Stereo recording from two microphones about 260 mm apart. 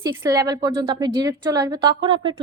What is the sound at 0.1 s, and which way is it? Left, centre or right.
A woman's voice, centre.